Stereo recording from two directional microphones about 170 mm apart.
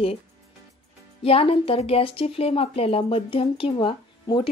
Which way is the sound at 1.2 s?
35° left (ahead or behind).